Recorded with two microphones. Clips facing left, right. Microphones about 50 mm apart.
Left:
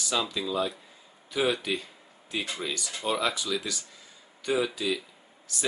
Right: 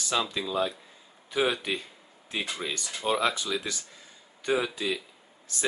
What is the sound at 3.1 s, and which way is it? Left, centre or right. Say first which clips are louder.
Speech: right 2 dB; right.